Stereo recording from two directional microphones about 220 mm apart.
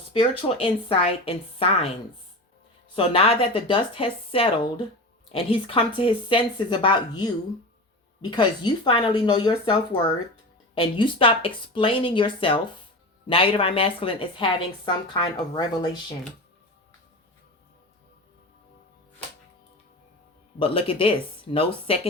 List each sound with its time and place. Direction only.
0.1 s a woman's voice: 25° left (ahead or behind)
2.9 s a woman's voice: 25° left (ahead or behind)
10.8 s a woman's voice: 25° left (ahead or behind)
20.6 s a woman's voice: 25° left (ahead or behind)